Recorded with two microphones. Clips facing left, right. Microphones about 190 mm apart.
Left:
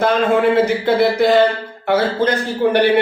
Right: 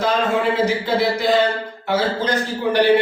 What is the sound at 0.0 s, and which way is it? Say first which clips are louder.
A man's voice: left 4 dB; 55° left (ahead or behind).